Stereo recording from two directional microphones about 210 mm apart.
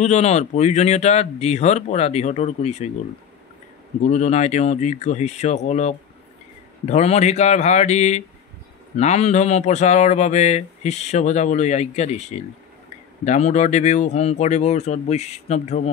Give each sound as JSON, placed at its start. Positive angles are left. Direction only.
{"t": 0.0, "sound": "speech", "side_deg": 35}
{"t": 4.1, "sound": "speech", "side_deg": 35}